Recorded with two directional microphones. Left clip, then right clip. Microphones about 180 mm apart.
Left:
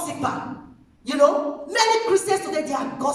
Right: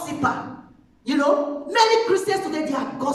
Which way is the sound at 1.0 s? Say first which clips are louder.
Left 2 dB; 30° left (ahead or behind).